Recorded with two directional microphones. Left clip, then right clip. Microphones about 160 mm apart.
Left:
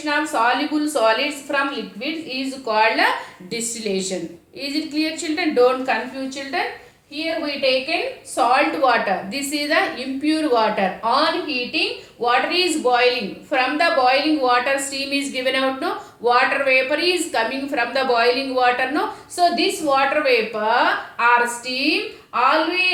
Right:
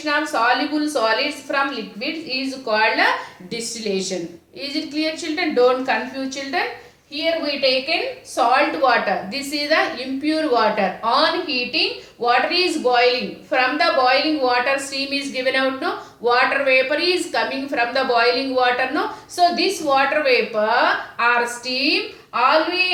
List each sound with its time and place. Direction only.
0.0 s a woman's voice: 15° left (ahead or behind)
2.6 s a woman's voice: 20° left (ahead or behind)